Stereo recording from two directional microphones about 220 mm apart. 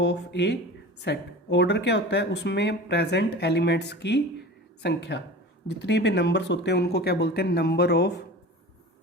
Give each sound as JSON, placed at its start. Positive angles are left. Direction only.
{"t": 0.0, "sound": "speech", "side_deg": 50}